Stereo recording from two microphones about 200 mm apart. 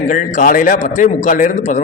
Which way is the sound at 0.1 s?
40° left (ahead or behind).